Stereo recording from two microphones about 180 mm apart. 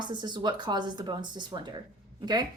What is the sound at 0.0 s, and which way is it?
A woman's voice, 25° right (ahead or behind).